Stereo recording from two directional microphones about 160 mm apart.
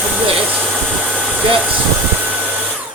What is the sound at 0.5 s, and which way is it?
Hair dryer, 10° right (ahead or behind).